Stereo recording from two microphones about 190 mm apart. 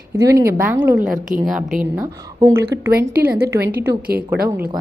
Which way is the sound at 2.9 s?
55° right (ahead or behind).